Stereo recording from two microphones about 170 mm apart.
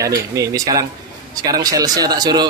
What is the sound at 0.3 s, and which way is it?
Speech, 20° right (ahead or behind).